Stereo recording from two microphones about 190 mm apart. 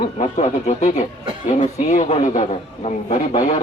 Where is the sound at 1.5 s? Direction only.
35° left (ahead or behind).